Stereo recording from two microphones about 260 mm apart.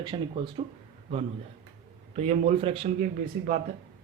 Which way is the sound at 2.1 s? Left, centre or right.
Right.